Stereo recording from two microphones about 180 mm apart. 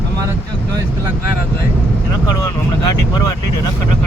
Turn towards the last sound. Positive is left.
turn(degrees=20)  # may be behind; listen again after turning